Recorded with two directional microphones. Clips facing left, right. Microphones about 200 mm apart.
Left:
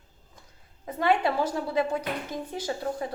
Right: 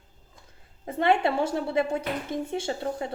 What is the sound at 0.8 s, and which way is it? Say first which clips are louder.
A woman's voice: right 1 dB; 25° right (ahead or behind).